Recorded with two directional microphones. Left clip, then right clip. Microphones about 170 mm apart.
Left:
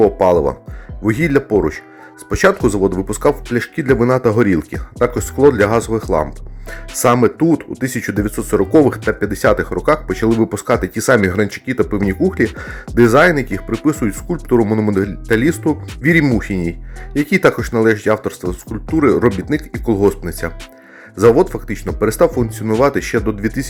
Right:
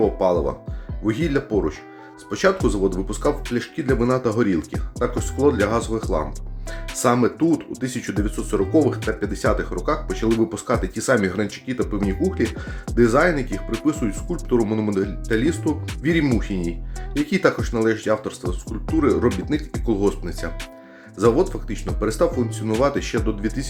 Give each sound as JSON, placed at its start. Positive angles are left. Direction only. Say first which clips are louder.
{"t": 0.2, "sound": "speech", "louder": "left 7 dB", "side_deg": 40}